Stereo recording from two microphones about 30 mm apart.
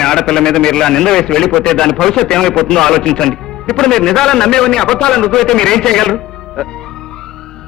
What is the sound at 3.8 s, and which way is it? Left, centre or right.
A man's voice, centre.